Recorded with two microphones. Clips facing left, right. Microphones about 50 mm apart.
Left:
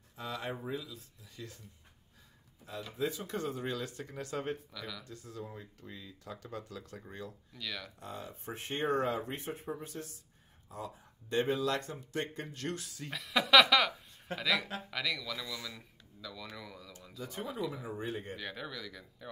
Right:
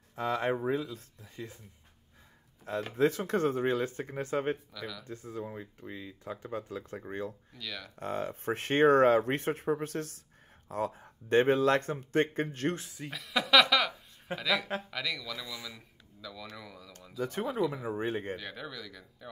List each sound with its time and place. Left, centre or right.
0.1 s speech: right
2.6 s speech: right
4.7 s speech: centre
5.0 s speech: right
7.5 s speech: centre
8.0 s speech: right
10.7 s speech: right
13.1 s speech: centre
17.2 s speech: right
17.8 s speech: right
18.3 s speech: centre